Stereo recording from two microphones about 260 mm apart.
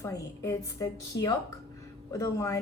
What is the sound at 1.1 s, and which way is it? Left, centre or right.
Speech, left.